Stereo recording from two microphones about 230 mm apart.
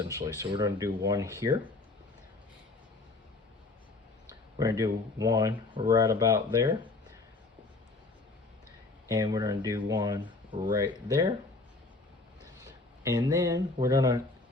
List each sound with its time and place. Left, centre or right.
0.0 s speech: centre
4.5 s speech: centre
9.0 s speech: centre
13.0 s speech: centre